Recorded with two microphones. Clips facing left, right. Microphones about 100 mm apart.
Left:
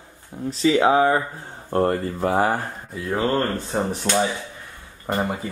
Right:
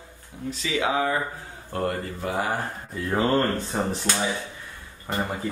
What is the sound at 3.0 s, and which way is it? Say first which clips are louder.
Speech: even; centre (ahead or behind).